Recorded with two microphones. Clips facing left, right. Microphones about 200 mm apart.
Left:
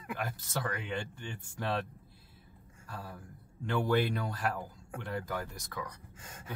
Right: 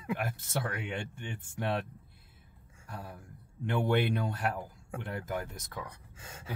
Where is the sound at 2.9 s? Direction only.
20° right (ahead or behind).